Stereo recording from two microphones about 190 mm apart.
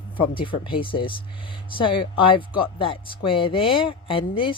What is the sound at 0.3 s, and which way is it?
Speech, 25° left (ahead or behind).